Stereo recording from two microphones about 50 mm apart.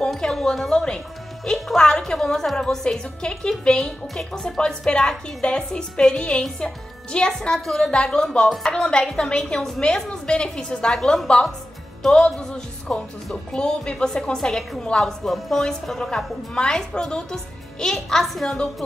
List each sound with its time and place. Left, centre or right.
0.2 s a woman's voice: centre
7.5 s a woman's voice: centre
7.9 s a woman's voice: centre
10.9 s a woman's voice: centre